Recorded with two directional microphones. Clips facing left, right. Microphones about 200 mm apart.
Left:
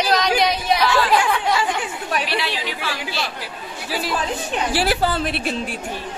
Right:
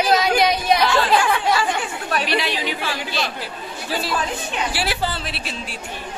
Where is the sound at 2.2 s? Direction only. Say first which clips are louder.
Right 2 dB; 20° right (ahead or behind).